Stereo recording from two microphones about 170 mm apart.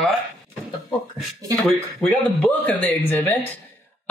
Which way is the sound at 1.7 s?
5° left (ahead or behind).